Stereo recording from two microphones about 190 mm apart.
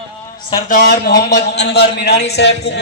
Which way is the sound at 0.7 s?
50° left (ahead or behind).